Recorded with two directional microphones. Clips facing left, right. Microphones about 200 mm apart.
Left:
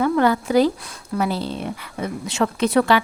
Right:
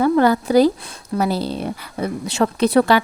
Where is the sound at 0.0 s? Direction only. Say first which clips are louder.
Right 3 dB; 35° right (ahead or behind).